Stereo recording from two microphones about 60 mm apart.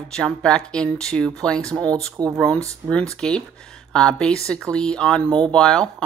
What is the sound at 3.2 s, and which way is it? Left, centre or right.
Speech, centre.